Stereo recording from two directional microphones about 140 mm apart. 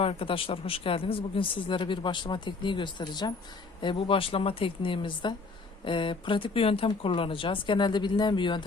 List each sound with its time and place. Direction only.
0.0 s speech: 40° left (ahead or behind)